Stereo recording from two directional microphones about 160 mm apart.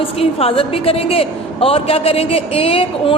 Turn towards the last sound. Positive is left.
turn(degrees=35)  # may be behind; listen again after turning